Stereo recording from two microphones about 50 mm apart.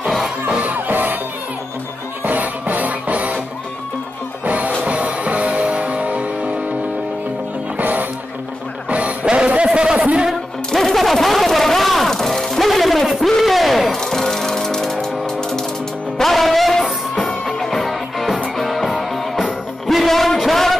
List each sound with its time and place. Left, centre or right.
0.5 s music: right
0.7 s music: right
2.2 s music: right
4.5 s music: right
7.7 s music: right; by 9.5 s centre
9.5 s a sound: right
10.7 s music: centre